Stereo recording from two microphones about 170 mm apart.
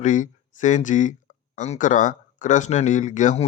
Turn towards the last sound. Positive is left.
turn(degrees=45)  # may be behind; listen again after turning